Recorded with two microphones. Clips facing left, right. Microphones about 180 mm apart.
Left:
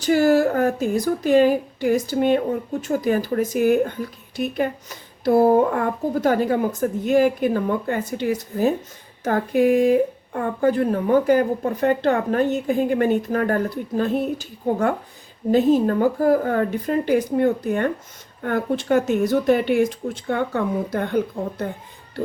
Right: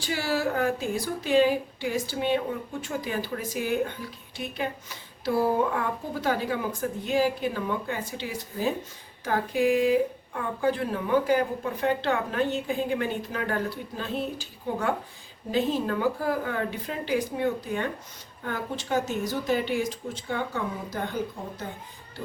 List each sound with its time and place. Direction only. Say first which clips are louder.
0.0 s speech: left 11 dB; 45° left (ahead or behind)
15.5 s speech: left 9 dB; 45° left (ahead or behind)